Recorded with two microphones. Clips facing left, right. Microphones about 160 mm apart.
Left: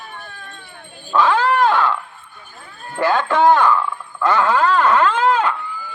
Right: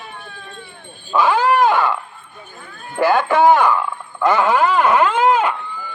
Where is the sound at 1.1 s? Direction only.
10° right (ahead or behind).